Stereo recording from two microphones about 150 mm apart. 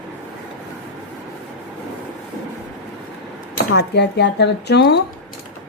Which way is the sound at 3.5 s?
90° left.